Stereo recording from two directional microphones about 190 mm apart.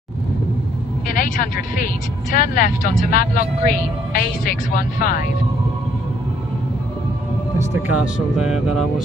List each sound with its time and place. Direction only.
1.1 s speech: 45° left (ahead or behind)
7.7 s speech: 10° right (ahead or behind)